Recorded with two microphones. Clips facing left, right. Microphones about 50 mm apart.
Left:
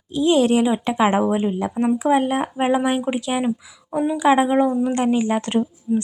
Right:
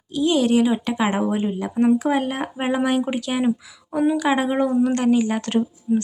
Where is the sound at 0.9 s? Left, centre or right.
Centre.